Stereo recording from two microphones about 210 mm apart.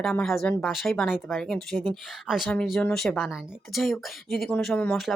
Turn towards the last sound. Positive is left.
turn(degrees=5)  # may be behind; listen again after turning